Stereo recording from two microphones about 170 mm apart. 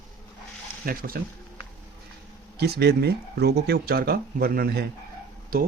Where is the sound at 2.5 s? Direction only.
70° right (ahead or behind).